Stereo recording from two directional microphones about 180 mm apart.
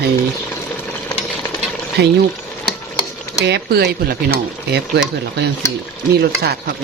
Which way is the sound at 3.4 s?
70° right (ahead or behind).